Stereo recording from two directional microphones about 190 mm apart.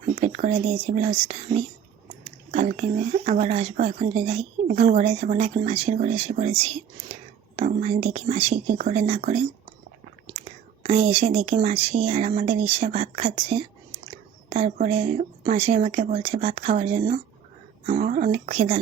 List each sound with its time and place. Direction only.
0.0 s speech: 40° right (ahead or behind)
10.8 s speech: 35° right (ahead or behind)